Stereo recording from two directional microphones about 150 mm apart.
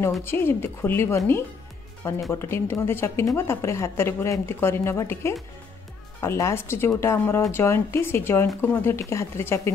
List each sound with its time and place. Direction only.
0.2 s a woman's voice: 15° left (ahead or behind)